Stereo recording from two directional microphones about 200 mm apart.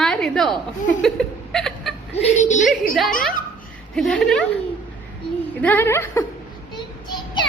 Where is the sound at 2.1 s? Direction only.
35° left (ahead or behind).